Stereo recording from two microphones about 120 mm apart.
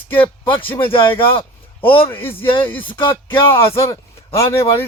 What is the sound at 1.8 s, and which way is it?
Speech, 50° left (ahead or behind).